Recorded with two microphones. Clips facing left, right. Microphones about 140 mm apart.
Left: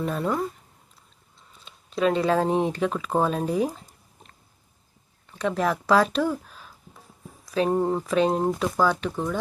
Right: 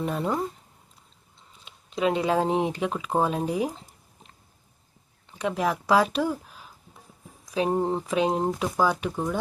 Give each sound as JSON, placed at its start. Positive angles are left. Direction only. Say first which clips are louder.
{"t": 0.0, "sound": "speech", "louder": "left 1 dB", "side_deg": -15}
{"t": 1.6, "sound": "speech", "louder": "left 2 dB", "side_deg": -15}
{"t": 5.3, "sound": "speech", "louder": "left 2 dB", "side_deg": -15}